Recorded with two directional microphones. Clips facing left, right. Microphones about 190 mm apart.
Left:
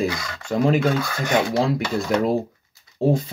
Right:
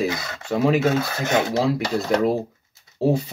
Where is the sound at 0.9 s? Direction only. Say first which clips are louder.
Right 1 dB; 25° right (ahead or behind).